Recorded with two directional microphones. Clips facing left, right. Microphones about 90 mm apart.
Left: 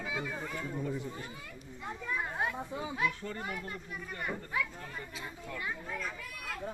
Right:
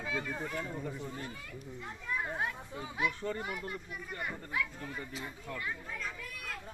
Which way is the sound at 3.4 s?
10° right (ahead or behind).